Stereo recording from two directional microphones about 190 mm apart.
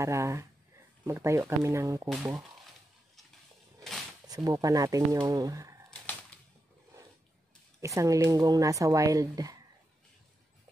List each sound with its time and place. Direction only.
0.0 s speech: 15° right (ahead or behind)
4.3 s speech: 20° right (ahead or behind)
5.9 s a sound: 5° left (ahead or behind)
7.8 s speech: 15° right (ahead or behind)